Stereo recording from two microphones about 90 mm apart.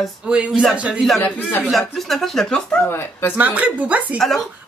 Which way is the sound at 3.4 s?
15° right (ahead or behind).